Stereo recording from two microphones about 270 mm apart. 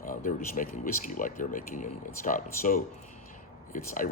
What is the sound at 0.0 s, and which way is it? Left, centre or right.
Speech, left.